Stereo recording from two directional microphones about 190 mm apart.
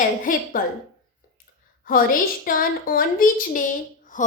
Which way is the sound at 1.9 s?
50° left (ahead or behind).